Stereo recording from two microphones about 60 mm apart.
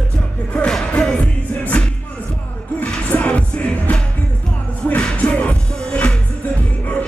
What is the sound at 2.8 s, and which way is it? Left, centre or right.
Music, left.